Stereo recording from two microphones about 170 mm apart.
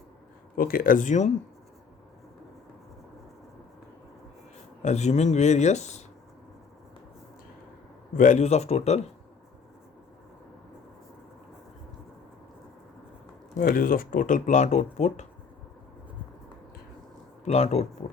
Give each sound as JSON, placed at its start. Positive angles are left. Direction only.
{"t": 0.5, "sound": "speech", "side_deg": 55}
{"t": 4.8, "sound": "speech", "side_deg": 40}
{"t": 8.1, "sound": "speech", "side_deg": 50}
{"t": 13.6, "sound": "speech", "side_deg": 55}
{"t": 17.4, "sound": "speech", "side_deg": 40}